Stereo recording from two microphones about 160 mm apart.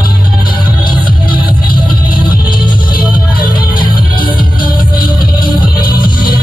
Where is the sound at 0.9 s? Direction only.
30° left (ahead or behind).